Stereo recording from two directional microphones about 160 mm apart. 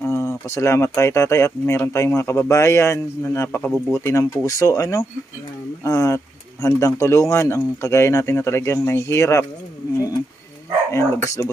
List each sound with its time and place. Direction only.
0.0 s speech: 15° left (ahead or behind)
10.9 s speech: 15° left (ahead or behind)